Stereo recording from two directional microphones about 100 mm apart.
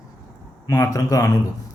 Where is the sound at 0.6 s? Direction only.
35° left (ahead or behind).